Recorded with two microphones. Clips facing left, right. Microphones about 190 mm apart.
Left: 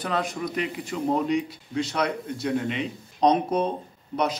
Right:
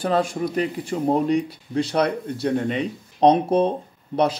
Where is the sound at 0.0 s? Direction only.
30° right (ahead or behind).